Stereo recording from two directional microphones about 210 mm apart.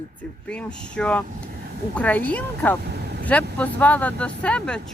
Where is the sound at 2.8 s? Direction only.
50° right (ahead or behind).